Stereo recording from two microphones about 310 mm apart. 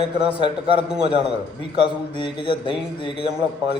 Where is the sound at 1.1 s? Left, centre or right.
Centre.